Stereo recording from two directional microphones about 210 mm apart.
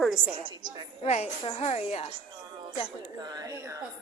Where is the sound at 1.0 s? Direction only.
30° left (ahead or behind).